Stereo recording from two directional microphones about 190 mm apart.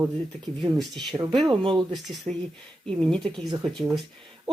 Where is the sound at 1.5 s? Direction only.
25° right (ahead or behind).